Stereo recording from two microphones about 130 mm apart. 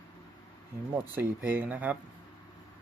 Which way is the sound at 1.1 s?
15° right (ahead or behind).